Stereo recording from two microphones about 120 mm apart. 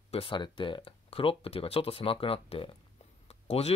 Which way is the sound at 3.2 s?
60° left (ahead or behind).